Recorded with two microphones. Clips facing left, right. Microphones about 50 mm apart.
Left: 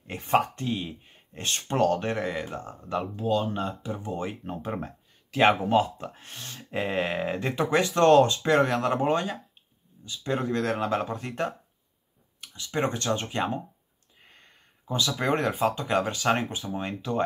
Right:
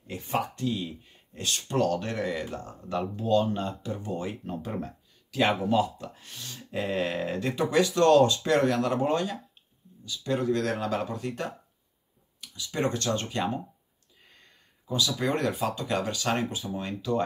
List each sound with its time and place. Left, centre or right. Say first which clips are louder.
0.0 s speech: left 6 dB; left
0.6 s speech: even; left
2.9 s speech: right 1 dB; centre
14.2 s a sound: left 2 dB; left
15.6 s speech: left 4 dB; left